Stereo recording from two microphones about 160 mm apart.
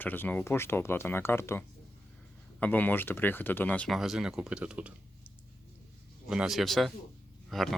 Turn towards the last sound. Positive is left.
turn(degrees=0)  # may be behind; listen again after turning